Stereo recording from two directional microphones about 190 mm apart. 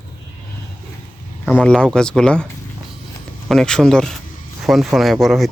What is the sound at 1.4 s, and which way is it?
Speech, 5° left (ahead or behind).